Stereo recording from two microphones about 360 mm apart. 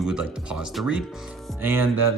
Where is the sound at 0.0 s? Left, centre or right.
Centre.